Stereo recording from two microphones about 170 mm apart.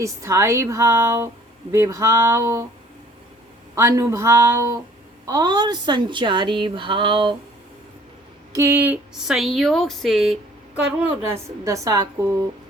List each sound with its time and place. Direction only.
0.0 s speech: 15° right (ahead or behind)
3.8 s a woman's voice: 15° right (ahead or behind)
8.5 s speech: 15° right (ahead or behind); by 10.3 s centre (ahead or behind)
11.0 s a woman's voice: 15° right (ahead or behind)